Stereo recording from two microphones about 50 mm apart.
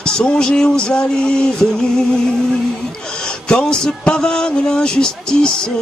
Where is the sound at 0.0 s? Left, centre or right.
Centre.